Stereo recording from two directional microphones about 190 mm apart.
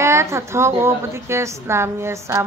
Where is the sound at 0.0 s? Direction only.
15° right (ahead or behind).